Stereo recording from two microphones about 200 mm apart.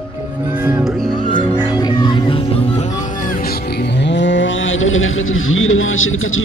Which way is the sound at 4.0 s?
65° left (ahead or behind).